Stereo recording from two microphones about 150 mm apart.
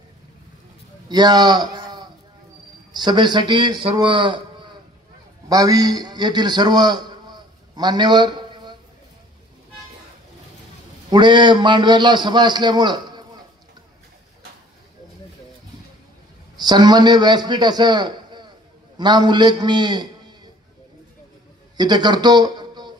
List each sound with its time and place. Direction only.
1.0 s speech: 30° right (ahead or behind)
5.5 s a man's voice: 25° right (ahead or behind)
11.1 s a man's voice: 30° right (ahead or behind)
16.5 s a man's voice: 25° right (ahead or behind)
21.7 s a man's voice: 30° right (ahead or behind)